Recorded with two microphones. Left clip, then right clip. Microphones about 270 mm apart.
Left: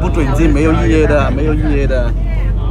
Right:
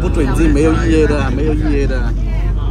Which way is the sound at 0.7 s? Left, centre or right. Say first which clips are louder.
Left 1 dB; right.